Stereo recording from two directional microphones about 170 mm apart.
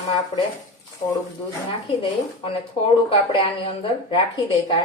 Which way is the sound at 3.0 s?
30° left (ahead or behind).